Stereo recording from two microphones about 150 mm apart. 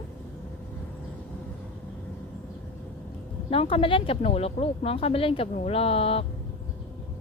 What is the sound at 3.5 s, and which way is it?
Speech, 40° left (ahead or behind).